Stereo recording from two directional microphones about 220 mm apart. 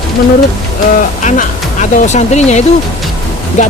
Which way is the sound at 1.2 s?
35° left (ahead or behind).